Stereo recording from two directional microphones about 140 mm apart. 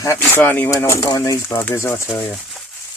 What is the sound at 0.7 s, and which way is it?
Speech, 25° left (ahead or behind).